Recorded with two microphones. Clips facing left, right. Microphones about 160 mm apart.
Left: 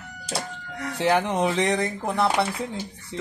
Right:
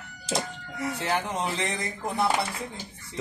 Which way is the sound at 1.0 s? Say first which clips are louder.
Left 9 dB; 65° left (ahead or behind).